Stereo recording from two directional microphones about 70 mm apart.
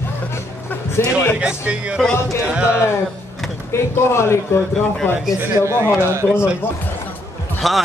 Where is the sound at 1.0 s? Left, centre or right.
Left.